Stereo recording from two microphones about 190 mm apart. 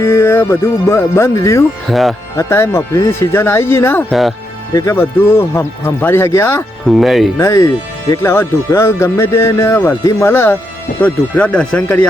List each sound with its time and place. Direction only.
0.0 s speech: 15° left (ahead or behind)
1.9 s speech: centre (ahead or behind)
2.3 s speech: 15° left (ahead or behind)
4.1 s speech: centre (ahead or behind)
4.7 s speech: 15° left (ahead or behind)
6.8 s speech: centre (ahead or behind)
7.3 s speech: 15° left (ahead or behind)